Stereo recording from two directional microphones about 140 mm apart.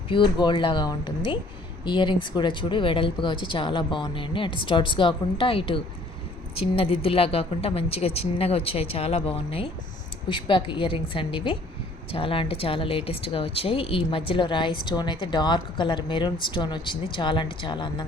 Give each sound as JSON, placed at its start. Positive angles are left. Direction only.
{"t": 0.1, "sound": "speech", "side_deg": 35}